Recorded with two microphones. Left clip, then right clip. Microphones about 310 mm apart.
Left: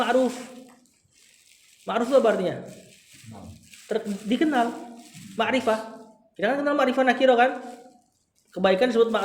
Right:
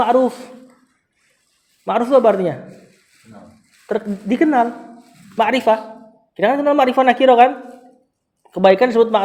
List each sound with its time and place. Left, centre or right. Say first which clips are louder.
1.8 s a woman's voice: right 7 dB; right
3.8 s a woman's voice: right 6 dB; right
8.5 s a woman's voice: right 8 dB; right